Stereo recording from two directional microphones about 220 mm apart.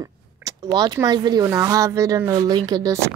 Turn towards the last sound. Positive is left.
turn(degrees=-15)  # may be behind; listen again after turning